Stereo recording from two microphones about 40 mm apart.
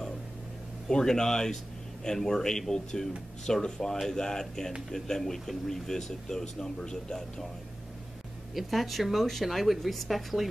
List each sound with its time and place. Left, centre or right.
0.8 s speech: centre
8.5 s a woman's voice: centre